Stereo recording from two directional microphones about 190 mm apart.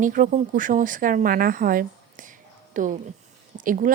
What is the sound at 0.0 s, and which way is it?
Speech, 45° right (ahead or behind).